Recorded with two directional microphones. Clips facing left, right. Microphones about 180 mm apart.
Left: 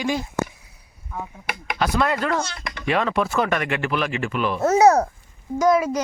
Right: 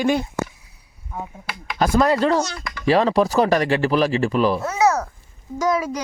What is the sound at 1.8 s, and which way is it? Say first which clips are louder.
Speech: right 5 dB; 40° right (ahead or behind).